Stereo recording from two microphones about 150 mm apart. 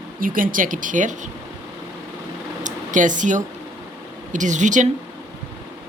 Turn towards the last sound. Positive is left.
turn(degrees=-55)  # may be behind; listen again after turning